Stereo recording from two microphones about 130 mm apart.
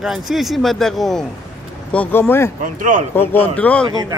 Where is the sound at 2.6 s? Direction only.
75° right (ahead or behind).